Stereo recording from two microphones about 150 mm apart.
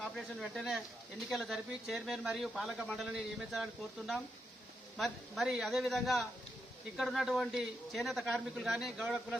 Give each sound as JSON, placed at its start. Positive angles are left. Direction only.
{"t": 0.0, "sound": "speech", "side_deg": 0}